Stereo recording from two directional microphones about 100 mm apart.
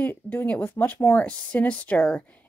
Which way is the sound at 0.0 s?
15° left (ahead or behind).